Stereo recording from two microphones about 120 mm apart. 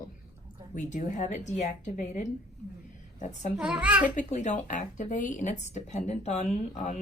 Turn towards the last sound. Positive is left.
turn(degrees=75)  # may be behind; listen again after turning